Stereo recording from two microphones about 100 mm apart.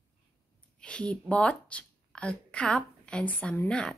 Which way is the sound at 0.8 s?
10° left (ahead or behind).